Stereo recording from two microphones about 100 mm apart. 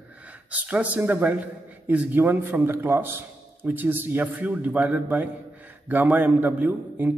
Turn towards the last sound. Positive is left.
turn(degrees=-20)  # may be behind; listen again after turning